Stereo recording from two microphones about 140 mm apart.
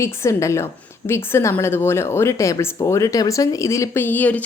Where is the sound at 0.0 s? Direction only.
20° left (ahead or behind).